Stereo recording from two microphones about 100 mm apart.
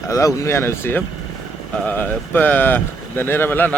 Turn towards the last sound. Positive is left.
turn(degrees=20)  # may be behind; listen again after turning